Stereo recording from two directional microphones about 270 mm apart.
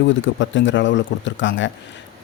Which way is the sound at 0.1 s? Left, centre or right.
Left.